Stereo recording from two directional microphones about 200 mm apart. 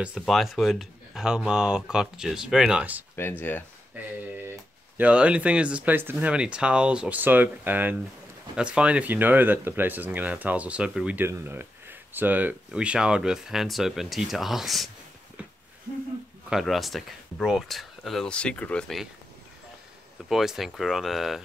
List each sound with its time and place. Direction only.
0.0 s speech: centre (ahead or behind)
3.2 s speech: 10° left (ahead or behind)
3.9 s a sound: 10° right (ahead or behind)
4.5 s speech: 10° right (ahead or behind)
16.4 s speech: centre (ahead or behind)
20.2 s speech: centre (ahead or behind)